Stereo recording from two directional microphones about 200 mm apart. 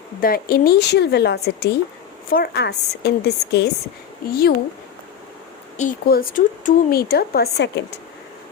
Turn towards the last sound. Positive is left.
turn(degrees=60)  # may be behind; listen again after turning